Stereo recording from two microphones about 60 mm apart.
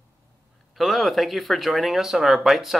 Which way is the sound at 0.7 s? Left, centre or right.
Centre.